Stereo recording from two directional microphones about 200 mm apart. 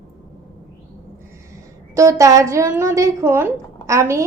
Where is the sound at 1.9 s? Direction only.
15° right (ahead or behind).